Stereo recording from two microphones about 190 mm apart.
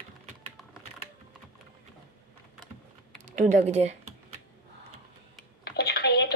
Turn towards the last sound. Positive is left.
turn(degrees=60)  # may be behind; listen again after turning